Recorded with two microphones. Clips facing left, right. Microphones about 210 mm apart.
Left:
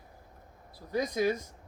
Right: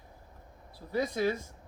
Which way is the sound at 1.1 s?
15° left (ahead or behind).